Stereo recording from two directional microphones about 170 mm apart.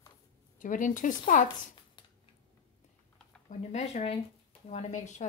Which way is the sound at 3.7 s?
40° left (ahead or behind).